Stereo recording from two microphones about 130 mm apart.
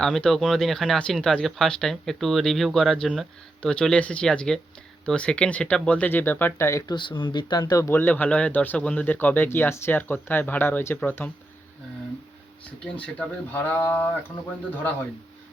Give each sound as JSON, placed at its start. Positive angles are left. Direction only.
{"t": 0.0, "sound": "speech", "side_deg": 5}
{"t": 6.9, "sound": "speech", "side_deg": 35}
{"t": 12.8, "sound": "speech", "side_deg": 10}